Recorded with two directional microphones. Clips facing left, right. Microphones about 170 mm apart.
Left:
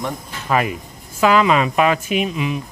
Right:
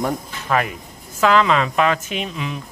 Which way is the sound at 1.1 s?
10° left (ahead or behind).